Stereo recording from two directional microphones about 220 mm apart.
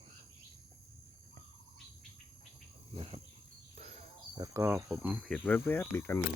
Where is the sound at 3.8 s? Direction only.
30° right (ahead or behind).